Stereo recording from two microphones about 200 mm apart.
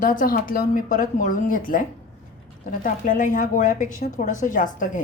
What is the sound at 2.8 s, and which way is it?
A woman's voice, 40° left (ahead or behind).